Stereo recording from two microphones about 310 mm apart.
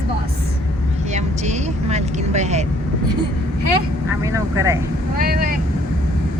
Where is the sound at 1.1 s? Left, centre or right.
Right.